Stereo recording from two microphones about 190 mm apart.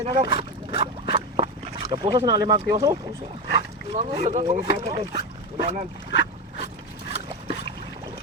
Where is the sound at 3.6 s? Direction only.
35° right (ahead or behind).